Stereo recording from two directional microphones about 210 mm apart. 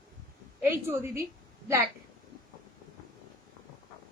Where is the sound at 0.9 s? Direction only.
10° right (ahead or behind).